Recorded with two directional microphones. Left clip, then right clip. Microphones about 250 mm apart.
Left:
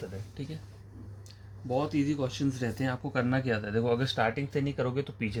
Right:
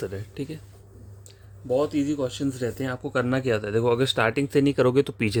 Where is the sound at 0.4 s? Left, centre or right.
Right.